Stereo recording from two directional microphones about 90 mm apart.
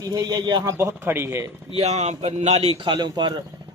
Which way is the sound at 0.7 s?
30° right (ahead or behind).